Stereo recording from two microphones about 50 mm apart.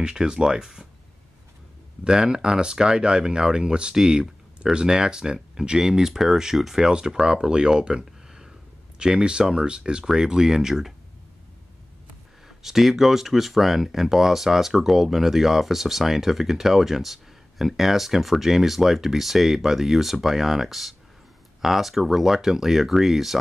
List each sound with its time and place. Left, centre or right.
0.0 s speech: centre
2.0 s speech: centre
12.4 s speech: centre